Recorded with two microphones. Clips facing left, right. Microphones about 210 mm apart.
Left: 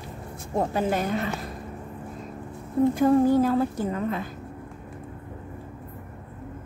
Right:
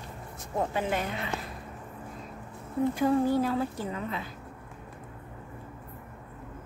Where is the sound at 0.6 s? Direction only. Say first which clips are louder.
Left 4 dB; 40° left (ahead or behind).